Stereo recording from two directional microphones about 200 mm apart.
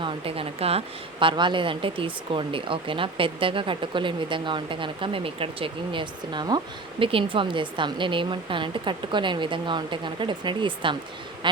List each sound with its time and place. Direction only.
0.0 s speech: 30° right (ahead or behind)